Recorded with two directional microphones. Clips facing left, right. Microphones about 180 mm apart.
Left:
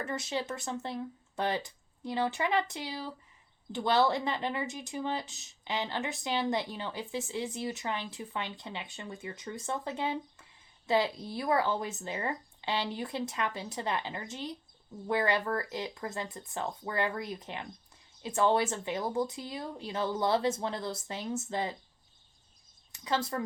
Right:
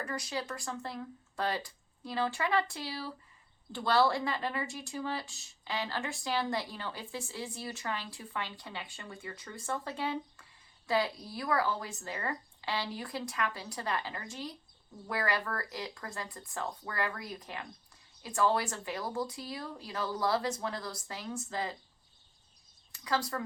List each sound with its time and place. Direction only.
0.0 s speech: 25° left (ahead or behind)
22.9 s speech: 20° left (ahead or behind)